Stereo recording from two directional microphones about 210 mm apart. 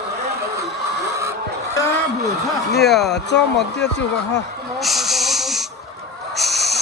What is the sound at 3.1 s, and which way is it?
Speech, 55° left (ahead or behind).